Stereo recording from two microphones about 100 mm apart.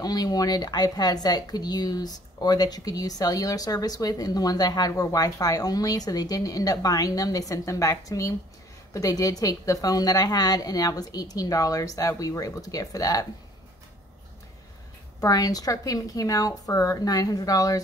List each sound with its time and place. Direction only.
0.0 s a woman's voice: 40° left (ahead or behind)
15.1 s a woman's voice: 35° left (ahead or behind)